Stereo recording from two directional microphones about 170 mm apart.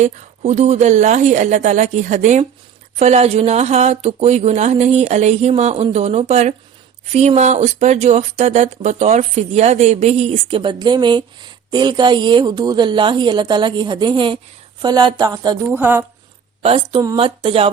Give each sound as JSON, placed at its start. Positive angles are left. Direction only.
{"t": 0.0, "sound": "speech", "side_deg": -40}
{"t": 15.7, "sound": "a woman's voice", "side_deg": -10}
{"t": 16.6, "sound": "speech", "side_deg": -35}
{"t": 17.0, "sound": "speech", "side_deg": -20}
{"t": 17.2, "sound": "speech", "side_deg": -35}